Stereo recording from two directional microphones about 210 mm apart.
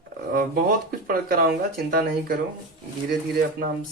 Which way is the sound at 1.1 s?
45° right (ahead or behind).